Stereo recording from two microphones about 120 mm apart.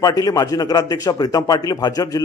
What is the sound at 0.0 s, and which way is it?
A man's voice, 30° left (ahead or behind).